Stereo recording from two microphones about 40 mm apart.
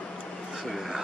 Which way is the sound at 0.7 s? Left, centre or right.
Centre.